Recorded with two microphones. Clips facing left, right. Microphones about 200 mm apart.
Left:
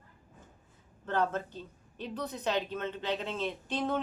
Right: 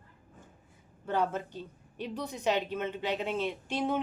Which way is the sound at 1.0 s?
10° right (ahead or behind).